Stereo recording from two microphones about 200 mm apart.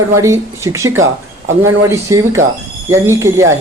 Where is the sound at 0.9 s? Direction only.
85° right.